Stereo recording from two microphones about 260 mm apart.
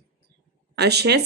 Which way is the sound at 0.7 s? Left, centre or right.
Right.